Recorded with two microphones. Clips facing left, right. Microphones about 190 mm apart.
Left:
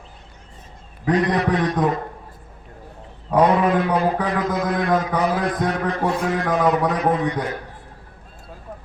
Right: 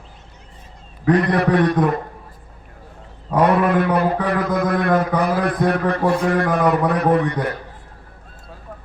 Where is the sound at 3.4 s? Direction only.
60° right (ahead or behind).